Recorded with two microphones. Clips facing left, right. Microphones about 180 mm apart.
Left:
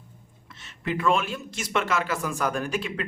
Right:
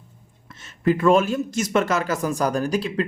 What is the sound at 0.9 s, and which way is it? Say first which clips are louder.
A man's voice: right 8 dB; 40° right (ahead or behind).